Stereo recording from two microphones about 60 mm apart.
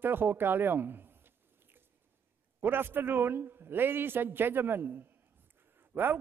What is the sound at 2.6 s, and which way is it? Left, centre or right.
A man's voice, right.